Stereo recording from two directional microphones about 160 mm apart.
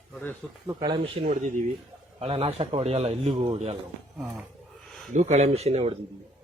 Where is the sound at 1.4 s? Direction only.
50° right (ahead or behind).